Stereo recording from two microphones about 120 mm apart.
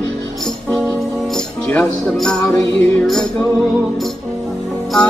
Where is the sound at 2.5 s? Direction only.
5° left (ahead or behind).